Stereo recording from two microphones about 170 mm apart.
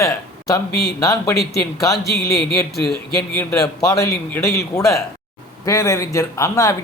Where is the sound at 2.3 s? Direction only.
65° left (ahead or behind).